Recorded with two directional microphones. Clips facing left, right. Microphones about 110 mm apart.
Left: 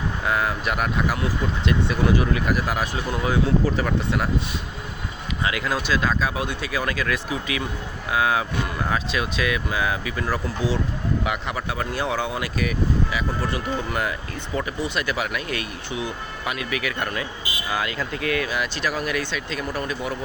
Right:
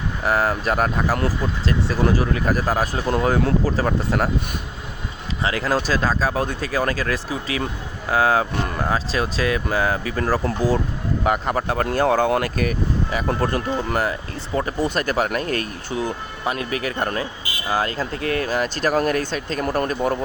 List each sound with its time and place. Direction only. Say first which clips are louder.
0.3 s speech: right 4 dB; 35° right (ahead or behind)
5.4 s speech: right 4 dB; 35° right (ahead or behind)
14.0 s speech: right 3 dB; 35° right (ahead or behind)